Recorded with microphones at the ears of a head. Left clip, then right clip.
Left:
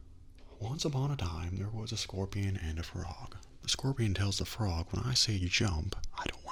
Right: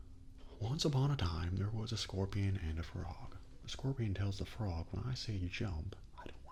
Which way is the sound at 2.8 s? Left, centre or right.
Left.